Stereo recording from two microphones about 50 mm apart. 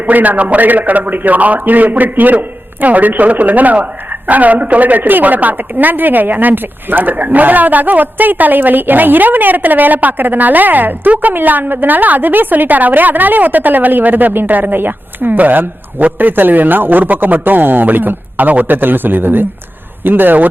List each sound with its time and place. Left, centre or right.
0.0 s a woman's voice: right